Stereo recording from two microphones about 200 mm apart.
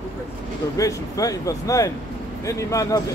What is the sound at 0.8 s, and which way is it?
Speech, 15° left (ahead or behind).